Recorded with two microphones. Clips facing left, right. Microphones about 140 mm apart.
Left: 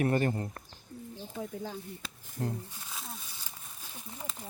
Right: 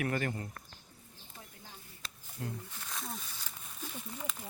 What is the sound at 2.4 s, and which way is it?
Speech, 40° left (ahead or behind).